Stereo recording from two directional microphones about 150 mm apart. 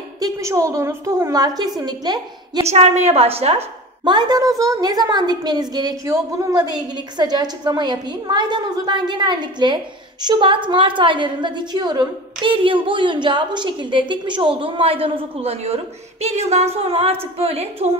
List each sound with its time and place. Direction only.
0.2 s a woman's voice: 20° right (ahead or behind)
2.7 s a woman's voice: 45° right (ahead or behind)
4.0 s a woman's voice: 30° right (ahead or behind)